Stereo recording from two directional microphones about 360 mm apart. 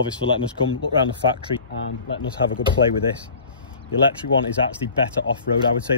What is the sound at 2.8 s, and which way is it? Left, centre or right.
Speech, left.